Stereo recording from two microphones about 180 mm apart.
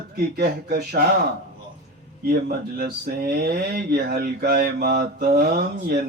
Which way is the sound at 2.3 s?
55° right (ahead or behind).